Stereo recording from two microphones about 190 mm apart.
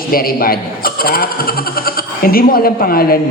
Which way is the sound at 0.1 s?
50° left (ahead or behind).